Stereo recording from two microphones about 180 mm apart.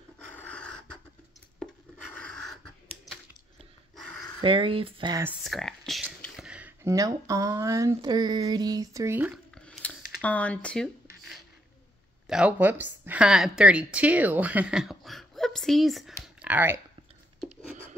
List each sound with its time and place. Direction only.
0.2 s dog: 5° left (ahead or behind)
2.1 s dog: 5° left (ahead or behind)
4.4 s speech: 30° right (ahead or behind)
5.4 s speech: centre (ahead or behind)
9.7 s a sound: 5° left (ahead or behind)
12.3 s speech: 5° right (ahead or behind)